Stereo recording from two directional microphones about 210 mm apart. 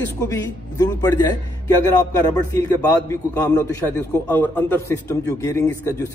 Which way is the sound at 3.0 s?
10° left (ahead or behind).